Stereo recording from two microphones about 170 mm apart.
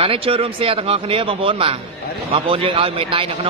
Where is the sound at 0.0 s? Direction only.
30° right (ahead or behind).